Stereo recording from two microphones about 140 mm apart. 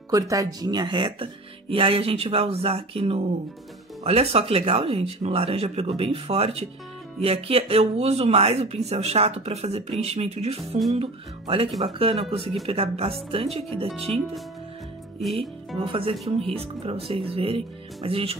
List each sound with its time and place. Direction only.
0.1 s speech: 25° right (ahead or behind); by 14.2 s 45° right (ahead or behind)
15.2 s music: centre (ahead or behind)
15.8 s speech: 40° right (ahead or behind)